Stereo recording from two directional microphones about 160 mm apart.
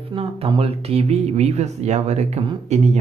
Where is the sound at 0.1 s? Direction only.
35° right (ahead or behind).